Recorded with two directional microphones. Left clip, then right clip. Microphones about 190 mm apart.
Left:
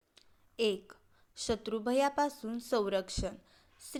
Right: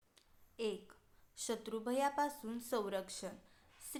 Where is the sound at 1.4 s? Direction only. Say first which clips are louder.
Left 7 dB; 25° left (ahead or behind).